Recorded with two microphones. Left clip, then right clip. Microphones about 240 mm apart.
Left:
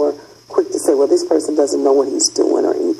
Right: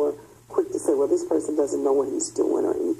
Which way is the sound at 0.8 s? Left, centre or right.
Left.